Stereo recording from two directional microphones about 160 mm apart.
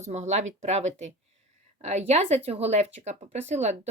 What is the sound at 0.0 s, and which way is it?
Speech, 45° right (ahead or behind).